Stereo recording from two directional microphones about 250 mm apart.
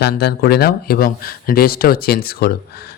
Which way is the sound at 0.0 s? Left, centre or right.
Left.